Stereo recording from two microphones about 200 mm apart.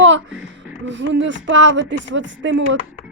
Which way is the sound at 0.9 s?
65° right (ahead or behind).